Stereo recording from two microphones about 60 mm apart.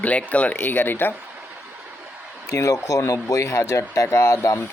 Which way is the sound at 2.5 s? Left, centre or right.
Left.